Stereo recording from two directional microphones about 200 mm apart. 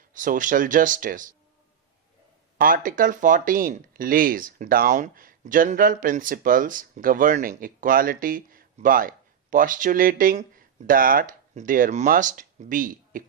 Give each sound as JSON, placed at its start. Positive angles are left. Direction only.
{"t": 0.1, "sound": "speech", "side_deg": -40}
{"t": 2.6, "sound": "speech", "side_deg": -45}